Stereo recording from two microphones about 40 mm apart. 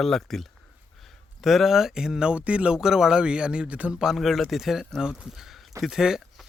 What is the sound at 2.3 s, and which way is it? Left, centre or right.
Speech, right.